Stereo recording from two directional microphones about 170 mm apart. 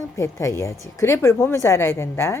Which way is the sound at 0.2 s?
15° left (ahead or behind).